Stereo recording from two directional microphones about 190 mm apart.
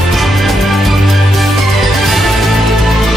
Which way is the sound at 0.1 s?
Centre (ahead or behind).